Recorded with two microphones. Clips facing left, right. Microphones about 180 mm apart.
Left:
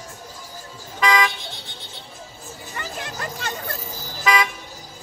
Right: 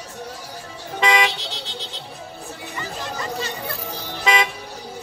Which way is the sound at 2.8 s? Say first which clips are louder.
Right 1 dB; 60° left (ahead or behind).